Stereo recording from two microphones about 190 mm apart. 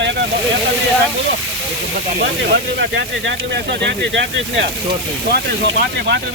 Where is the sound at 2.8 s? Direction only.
70° right (ahead or behind).